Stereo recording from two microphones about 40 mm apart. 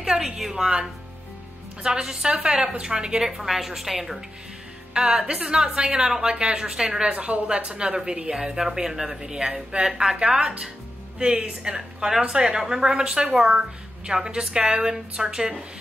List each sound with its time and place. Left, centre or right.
0.0 s a woman's voice: centre
1.8 s a woman's voice: centre
2.4 s a woman's voice: right
3.3 s a woman's voice: centre
4.9 s a woman's voice: centre
7.2 s a woman's voice: right; by 15.5 s centre